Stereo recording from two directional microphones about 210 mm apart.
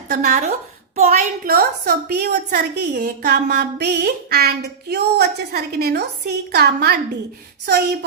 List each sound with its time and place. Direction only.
0.1 s a woman's voice: 40° right (ahead or behind)